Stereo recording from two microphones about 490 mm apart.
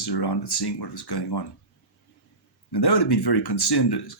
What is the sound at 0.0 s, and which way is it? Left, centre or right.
Speech, left.